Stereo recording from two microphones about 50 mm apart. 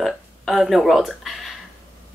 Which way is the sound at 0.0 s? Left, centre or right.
Centre.